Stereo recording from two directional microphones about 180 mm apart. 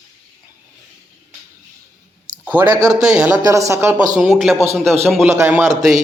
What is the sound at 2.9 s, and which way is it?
Speech, 5° right (ahead or behind).